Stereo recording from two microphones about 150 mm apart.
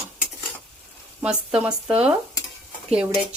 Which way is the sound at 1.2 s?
5° right (ahead or behind).